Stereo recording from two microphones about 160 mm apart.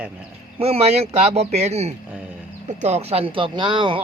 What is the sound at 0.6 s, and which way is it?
Speech, 40° right (ahead or behind).